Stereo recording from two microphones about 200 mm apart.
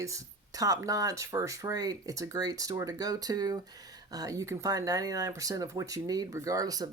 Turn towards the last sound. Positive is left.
turn(degrees=-20)  # may be behind; listen again after turning